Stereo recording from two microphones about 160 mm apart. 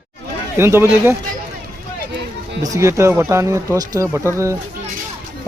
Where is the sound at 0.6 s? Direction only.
15° right (ahead or behind).